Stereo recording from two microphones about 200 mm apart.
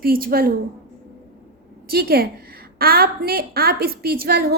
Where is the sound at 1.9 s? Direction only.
50° right (ahead or behind).